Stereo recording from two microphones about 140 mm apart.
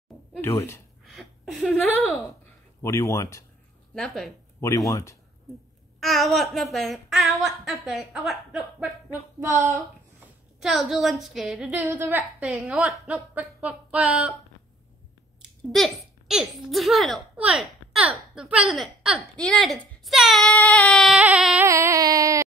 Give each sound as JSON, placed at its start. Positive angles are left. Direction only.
{"t": 0.4, "sound": "speech", "side_deg": 20}
{"t": 1.0, "sound": "a sound", "side_deg": 0}
{"t": 2.8, "sound": "speech", "side_deg": 20}
{"t": 3.9, "sound": "speech", "side_deg": 5}
{"t": 4.6, "sound": "speech", "side_deg": 20}
{"t": 5.9, "sound": "speech", "side_deg": 0}
{"t": 9.4, "sound": "a sound", "side_deg": -20}
{"t": 10.6, "sound": "a woman's voice", "side_deg": 0}
{"t": 15.7, "sound": "speech", "side_deg": 0}
{"t": 21.2, "sound": "a woman's voice", "side_deg": -5}
{"t": 21.6, "sound": "a sound", "side_deg": -20}